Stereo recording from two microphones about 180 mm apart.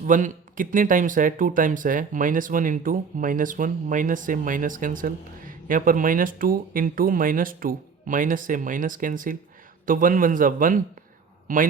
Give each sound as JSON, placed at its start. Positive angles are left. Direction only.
{"t": 0.0, "sound": "speech", "side_deg": -45}